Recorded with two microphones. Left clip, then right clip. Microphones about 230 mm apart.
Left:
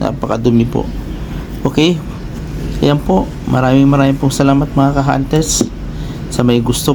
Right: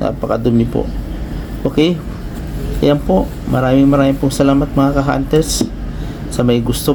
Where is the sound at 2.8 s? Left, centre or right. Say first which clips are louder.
Even; centre.